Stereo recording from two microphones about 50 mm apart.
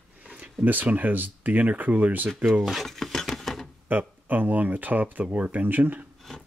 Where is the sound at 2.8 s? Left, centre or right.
Centre.